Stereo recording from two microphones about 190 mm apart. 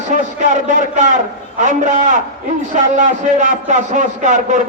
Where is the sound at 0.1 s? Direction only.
40° right (ahead or behind).